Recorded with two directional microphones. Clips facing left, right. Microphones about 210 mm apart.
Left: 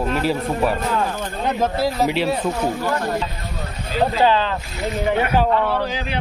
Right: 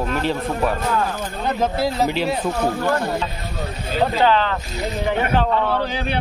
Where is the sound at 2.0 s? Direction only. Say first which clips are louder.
Left 1 dB; centre (ahead or behind).